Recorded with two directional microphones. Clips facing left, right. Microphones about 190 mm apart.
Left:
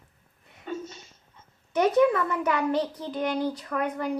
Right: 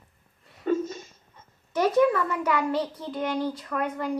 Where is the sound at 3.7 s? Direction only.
Centre (ahead or behind).